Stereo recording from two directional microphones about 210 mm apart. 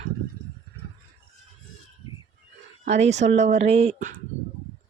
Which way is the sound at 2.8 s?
30° right (ahead or behind).